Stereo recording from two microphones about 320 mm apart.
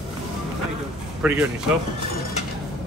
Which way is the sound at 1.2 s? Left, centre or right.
Centre.